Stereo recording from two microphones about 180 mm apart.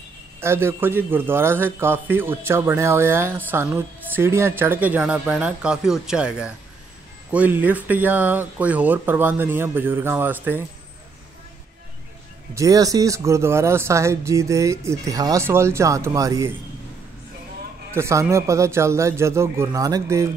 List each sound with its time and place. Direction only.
0.4 s a man's voice: 15° right (ahead or behind)
12.5 s a man's voice: 20° right (ahead or behind)
17.9 s a man's voice: 15° right (ahead or behind)